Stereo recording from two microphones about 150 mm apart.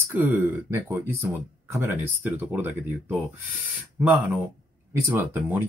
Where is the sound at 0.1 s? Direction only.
15° right (ahead or behind).